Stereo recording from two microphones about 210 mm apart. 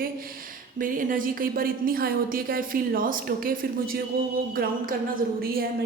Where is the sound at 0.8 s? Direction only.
40° right (ahead or behind).